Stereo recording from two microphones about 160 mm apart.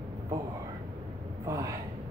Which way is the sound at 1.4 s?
20° right (ahead or behind).